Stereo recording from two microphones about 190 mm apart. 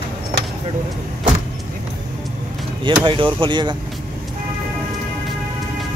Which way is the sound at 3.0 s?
25° right (ahead or behind).